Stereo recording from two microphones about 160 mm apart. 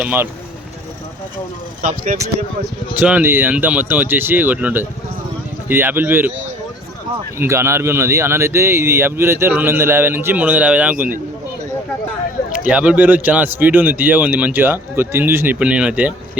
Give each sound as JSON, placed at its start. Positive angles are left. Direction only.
{"t": 0.0, "sound": "speech", "side_deg": -10}
{"t": 1.8, "sound": "speech", "side_deg": -50}
{"t": 3.0, "sound": "speech", "side_deg": -10}
{"t": 7.3, "sound": "speech", "side_deg": -15}
{"t": 12.5, "sound": "speech", "side_deg": -5}